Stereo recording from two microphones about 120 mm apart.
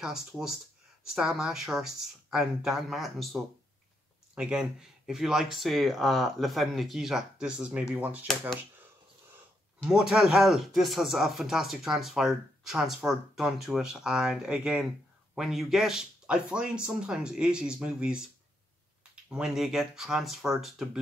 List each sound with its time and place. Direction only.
0.0 s speech: 5° right (ahead or behind)
4.4 s speech: 5° right (ahead or behind)
9.8 s speech: 5° right (ahead or behind)